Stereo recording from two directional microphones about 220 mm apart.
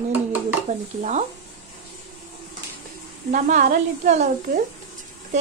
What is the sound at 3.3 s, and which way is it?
A woman's voice, 35° right (ahead or behind).